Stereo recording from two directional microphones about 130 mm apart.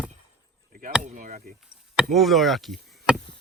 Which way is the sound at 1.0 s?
65° right (ahead or behind).